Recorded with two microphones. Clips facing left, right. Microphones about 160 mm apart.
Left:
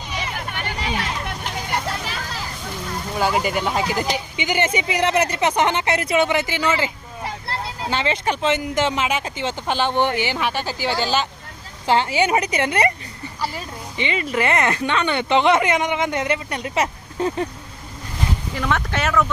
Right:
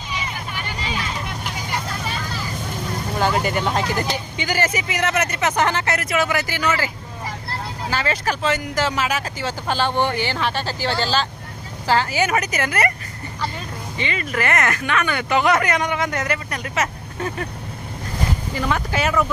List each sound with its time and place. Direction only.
0.1 s vehicle: 60° left (ahead or behind)
3.2 s speech: 5° left (ahead or behind); by 12.9 s 25° left (ahead or behind)
13.9 s speech: 20° left (ahead or behind)
18.5 s speech: 5° right (ahead or behind)